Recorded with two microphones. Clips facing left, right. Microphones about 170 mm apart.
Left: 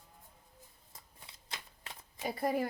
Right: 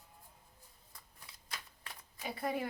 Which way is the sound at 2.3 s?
40° left (ahead or behind).